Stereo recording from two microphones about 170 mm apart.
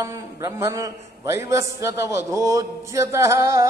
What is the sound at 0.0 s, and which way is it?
A man's voice, 20° right (ahead or behind).